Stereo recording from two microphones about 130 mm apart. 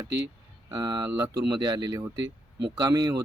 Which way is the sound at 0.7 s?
30° right (ahead or behind).